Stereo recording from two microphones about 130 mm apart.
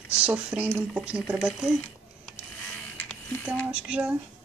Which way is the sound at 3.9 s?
10° right (ahead or behind).